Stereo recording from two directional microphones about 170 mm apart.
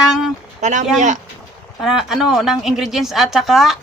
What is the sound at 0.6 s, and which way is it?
Speech, 45° right (ahead or behind).